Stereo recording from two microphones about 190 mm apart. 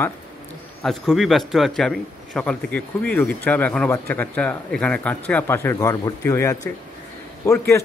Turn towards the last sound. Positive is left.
turn(degrees=15)  # may be behind; listen again after turning